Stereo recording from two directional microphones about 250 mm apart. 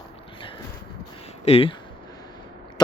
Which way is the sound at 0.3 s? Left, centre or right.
Centre.